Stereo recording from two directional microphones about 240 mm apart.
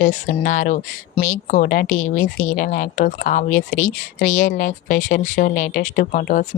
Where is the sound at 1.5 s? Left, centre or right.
Left.